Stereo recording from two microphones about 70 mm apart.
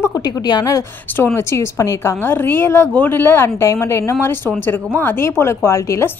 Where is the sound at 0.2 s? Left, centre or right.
Left.